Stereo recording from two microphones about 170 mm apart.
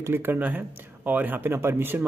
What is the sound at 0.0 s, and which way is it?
Speech, 15° right (ahead or behind).